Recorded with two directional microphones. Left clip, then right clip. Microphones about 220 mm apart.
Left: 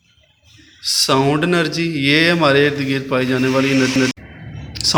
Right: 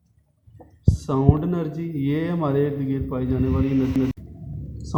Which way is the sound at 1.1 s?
40° left (ahead or behind).